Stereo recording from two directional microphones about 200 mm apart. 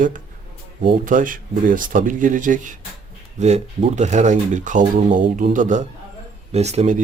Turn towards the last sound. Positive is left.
turn(degrees=-35)  # may be behind; listen again after turning